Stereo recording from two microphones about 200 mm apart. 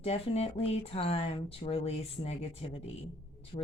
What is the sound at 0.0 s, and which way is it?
Speech, 30° left (ahead or behind).